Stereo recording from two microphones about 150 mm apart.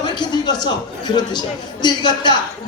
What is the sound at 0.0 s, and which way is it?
A man's voice, 30° left (ahead or behind).